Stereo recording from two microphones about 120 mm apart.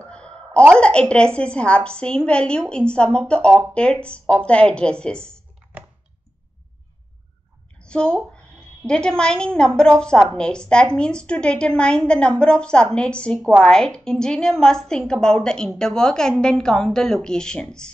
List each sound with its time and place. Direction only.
0.0 s a sound: 10° left (ahead or behind)
0.7 s a woman's voice: 10° left (ahead or behind)
7.8 s a woman's voice: 10° left (ahead or behind)